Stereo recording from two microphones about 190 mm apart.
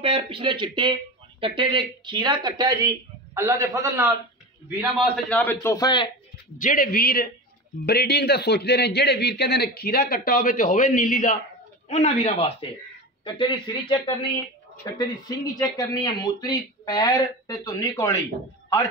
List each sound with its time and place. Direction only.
0.0 s speech: 30° right (ahead or behind)
5.1 s speech: 10° left (ahead or behind); by 6.1 s 25° left (ahead or behind)
6.6 s a man's voice: 45° left (ahead or behind); by 18.2 s 15° left (ahead or behind)